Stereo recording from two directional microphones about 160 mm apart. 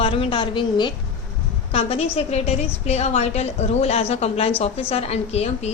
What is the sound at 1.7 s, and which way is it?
A woman's voice, 40° left (ahead or behind).